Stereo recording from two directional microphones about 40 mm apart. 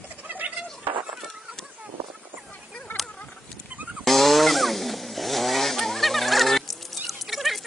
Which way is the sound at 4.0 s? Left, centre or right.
Centre.